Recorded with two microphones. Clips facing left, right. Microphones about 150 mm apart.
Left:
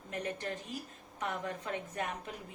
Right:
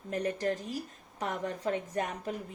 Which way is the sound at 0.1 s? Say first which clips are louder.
Right 7 dB; 40° right (ahead or behind).